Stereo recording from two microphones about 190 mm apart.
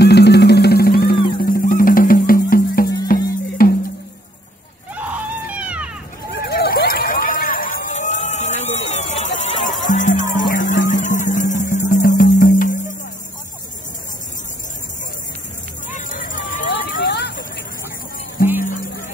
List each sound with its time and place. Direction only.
0.0 s music: 60° left (ahead or behind)
4.9 s screaming: 5° right (ahead or behind)
6.3 s a sound: 55° left (ahead or behind); by 9.8 s 40° left (ahead or behind)
9.8 s music: 40° left (ahead or behind)
15.9 s hubbub: 45° left (ahead or behind)
18.6 s music: 45° left (ahead or behind)